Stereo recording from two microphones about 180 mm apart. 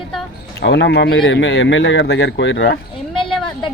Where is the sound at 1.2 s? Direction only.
90° left.